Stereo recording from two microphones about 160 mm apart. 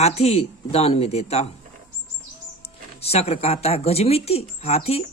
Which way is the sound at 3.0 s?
40° left (ahead or behind).